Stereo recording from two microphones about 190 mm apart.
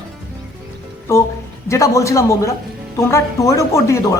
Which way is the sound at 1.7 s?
15° left (ahead or behind).